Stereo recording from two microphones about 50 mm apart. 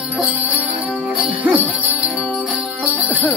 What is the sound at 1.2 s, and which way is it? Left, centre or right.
Jingle bell, right.